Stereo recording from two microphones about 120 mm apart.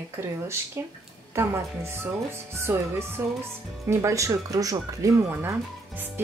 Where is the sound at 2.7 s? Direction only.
20° right (ahead or behind).